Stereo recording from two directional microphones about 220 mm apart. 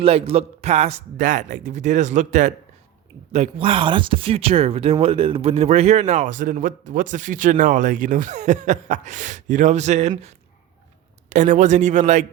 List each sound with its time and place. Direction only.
0.0 s speech: 25° right (ahead or behind)